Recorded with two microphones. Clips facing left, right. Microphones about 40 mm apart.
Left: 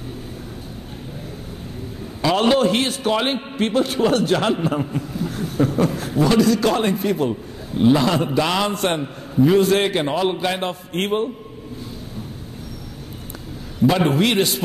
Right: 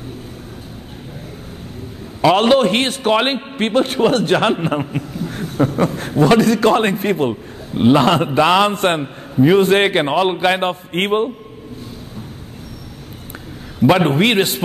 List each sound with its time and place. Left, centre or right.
2.2 s a man's voice: right
5.3 s a sound: right
5.9 s a man's voice: right
13.8 s a man's voice: right